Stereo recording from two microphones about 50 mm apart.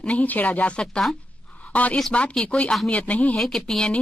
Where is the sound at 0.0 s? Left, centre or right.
Left.